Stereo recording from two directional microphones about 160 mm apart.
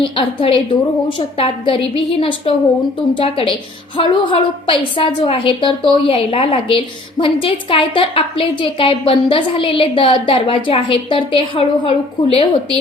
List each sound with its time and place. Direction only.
0.0 s a woman's voice: 35° left (ahead or behind)